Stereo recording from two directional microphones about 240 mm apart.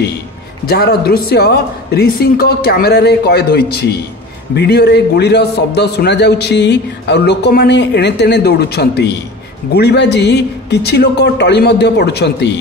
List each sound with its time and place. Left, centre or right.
0.7 s a man's voice: left